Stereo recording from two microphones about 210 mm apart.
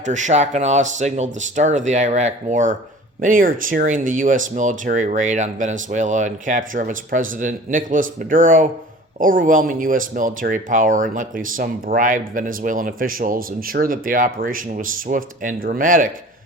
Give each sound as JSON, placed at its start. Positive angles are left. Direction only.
{"t": 0.0, "sound": "speech", "side_deg": -35}